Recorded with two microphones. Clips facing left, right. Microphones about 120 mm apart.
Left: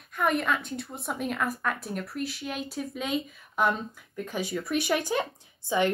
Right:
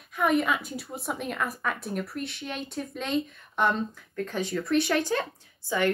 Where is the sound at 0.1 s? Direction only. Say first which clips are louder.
Right 2 dB; centre (ahead or behind).